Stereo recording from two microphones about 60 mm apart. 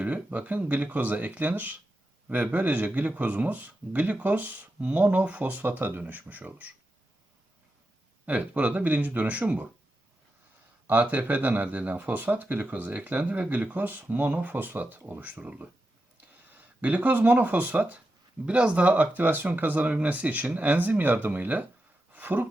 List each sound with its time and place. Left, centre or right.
0.0 s speech: right
8.3 s speech: right
10.8 s speech: right
22.1 s a sound: right